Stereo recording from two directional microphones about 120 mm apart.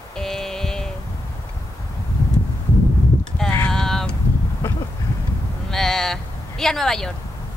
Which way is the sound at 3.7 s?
5° left (ahead or behind).